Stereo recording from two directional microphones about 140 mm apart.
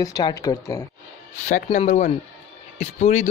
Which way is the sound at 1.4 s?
60° left (ahead or behind).